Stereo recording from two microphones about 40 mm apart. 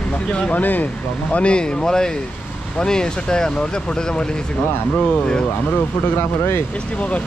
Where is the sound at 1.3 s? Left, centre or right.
Left.